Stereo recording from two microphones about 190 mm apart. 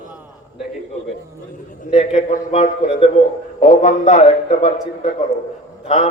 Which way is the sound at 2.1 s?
35° left (ahead or behind).